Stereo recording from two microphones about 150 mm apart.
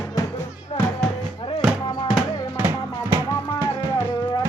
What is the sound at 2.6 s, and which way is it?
Music, 15° right (ahead or behind).